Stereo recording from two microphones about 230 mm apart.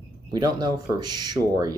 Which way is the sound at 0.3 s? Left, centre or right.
Centre.